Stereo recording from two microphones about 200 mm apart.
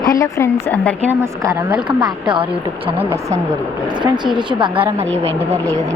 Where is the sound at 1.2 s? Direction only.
15° right (ahead or behind).